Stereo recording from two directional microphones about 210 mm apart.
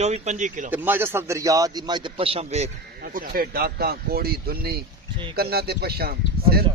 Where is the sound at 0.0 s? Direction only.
30° right (ahead or behind).